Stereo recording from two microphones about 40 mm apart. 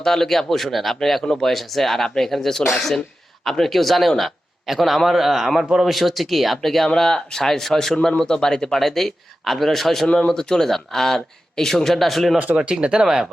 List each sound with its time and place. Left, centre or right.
0.0 s speech: centre
1.2 s speech: centre
1.5 s a man's voice: centre
10.2 s speech: centre
12.6 s speech: right